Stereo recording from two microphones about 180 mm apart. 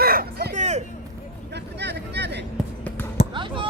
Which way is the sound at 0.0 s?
55° right (ahead or behind).